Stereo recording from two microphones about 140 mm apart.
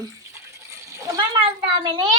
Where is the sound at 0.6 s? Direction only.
20° right (ahead or behind).